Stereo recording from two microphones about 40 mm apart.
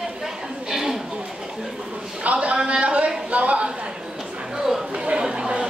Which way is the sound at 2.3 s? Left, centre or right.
Right.